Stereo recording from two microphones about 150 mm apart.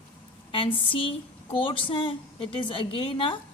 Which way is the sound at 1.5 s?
35° left (ahead or behind).